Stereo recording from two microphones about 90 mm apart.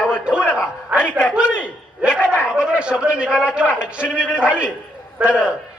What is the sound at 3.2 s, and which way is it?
A man's voice, 10° right (ahead or behind).